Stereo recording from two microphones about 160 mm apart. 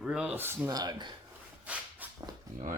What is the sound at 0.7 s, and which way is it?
Speech, 25° right (ahead or behind).